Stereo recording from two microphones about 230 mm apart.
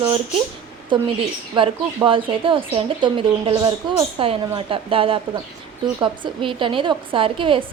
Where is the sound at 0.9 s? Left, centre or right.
Right.